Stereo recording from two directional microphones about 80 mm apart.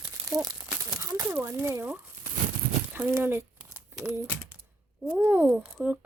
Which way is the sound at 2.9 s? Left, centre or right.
Right.